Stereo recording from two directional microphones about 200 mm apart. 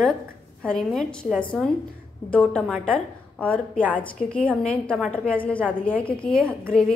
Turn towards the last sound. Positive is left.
turn(degrees=5)  # may be behind; listen again after turning